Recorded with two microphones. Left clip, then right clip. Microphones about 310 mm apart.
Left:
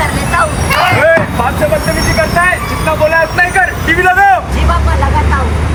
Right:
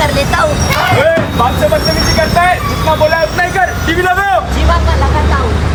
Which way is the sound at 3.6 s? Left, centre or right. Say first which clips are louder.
Left 2 dB; centre.